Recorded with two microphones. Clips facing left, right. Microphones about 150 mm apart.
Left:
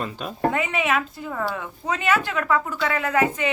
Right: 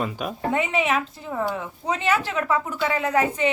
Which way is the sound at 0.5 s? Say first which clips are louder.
Right 1 dB; 25° right (ahead or behind).